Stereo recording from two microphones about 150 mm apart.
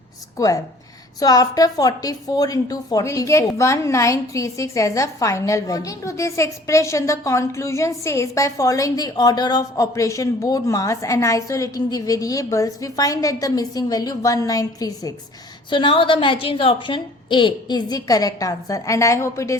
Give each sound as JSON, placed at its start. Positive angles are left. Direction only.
{"t": 0.3, "sound": "a woman's voice", "side_deg": 25}
{"t": 15.7, "sound": "a woman's voice", "side_deg": 35}